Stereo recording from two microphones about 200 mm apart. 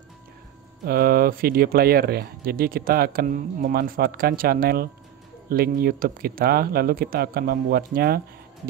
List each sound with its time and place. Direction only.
0.8 s speech: 50° right (ahead or behind)